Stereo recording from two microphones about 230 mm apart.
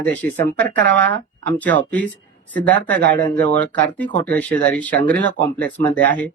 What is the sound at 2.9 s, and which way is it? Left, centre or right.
Speech, right.